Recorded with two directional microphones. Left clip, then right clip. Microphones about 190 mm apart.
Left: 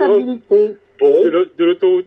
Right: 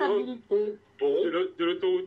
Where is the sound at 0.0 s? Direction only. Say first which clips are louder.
Left 13 dB; 45° left (ahead or behind).